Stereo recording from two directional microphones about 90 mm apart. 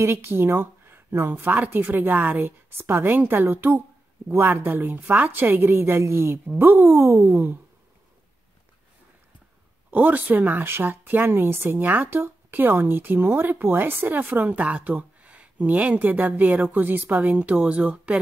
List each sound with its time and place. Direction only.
0.0 s speech: 25° right (ahead or behind)
9.8 s speech: 20° right (ahead or behind)